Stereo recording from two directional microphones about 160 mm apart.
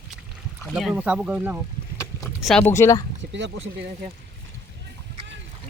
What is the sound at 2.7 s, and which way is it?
Speech, 20° left (ahead or behind).